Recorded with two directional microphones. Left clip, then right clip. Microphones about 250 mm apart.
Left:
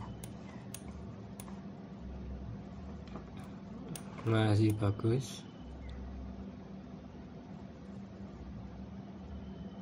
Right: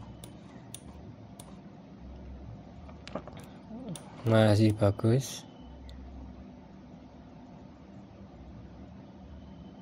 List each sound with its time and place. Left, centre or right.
4.3 s speech: right